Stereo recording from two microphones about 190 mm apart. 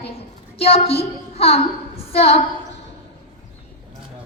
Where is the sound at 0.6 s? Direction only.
30° left (ahead or behind).